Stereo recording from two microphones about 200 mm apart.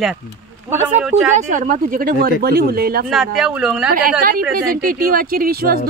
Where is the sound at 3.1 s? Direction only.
Centre (ahead or behind).